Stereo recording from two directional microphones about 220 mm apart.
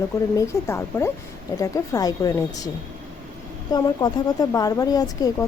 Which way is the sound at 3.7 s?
20° left (ahead or behind).